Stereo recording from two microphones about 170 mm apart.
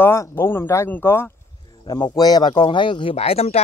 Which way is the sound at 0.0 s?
15° left (ahead or behind).